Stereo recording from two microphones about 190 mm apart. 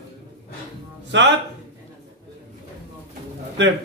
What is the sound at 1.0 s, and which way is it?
Speech, 70° right (ahead or behind).